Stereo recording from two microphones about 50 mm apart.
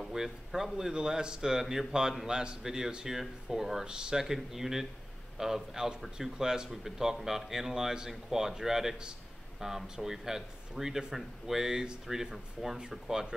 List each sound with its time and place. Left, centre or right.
0.0 s a man's voice: centre